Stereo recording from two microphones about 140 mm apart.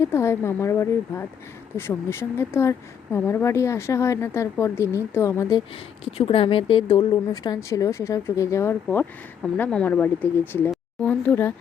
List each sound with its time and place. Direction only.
0.0 s speech: 20° left (ahead or behind)
6.1 s speech: 45° left (ahead or behind); by 10.6 s 15° left (ahead or behind)
11.0 s a sound: 10° left (ahead or behind)